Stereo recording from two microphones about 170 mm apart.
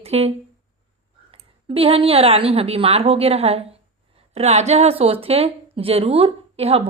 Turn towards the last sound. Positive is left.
turn(degrees=-35)  # may be behind; listen again after turning